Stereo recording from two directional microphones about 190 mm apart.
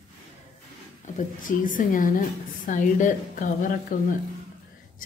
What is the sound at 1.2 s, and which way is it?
A woman's voice, 45° left (ahead or behind).